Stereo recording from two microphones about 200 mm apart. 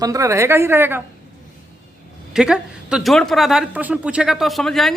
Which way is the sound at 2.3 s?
5° right (ahead or behind).